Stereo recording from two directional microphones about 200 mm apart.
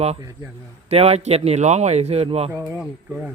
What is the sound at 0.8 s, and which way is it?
Speech, 30° right (ahead or behind).